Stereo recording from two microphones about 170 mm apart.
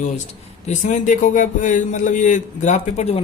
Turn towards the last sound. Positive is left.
turn(degrees=40)  # may be behind; listen again after turning